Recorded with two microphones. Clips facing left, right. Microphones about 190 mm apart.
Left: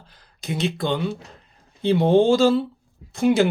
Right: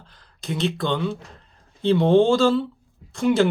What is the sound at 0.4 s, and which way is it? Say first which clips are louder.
Speech: even; 15° left (ahead or behind).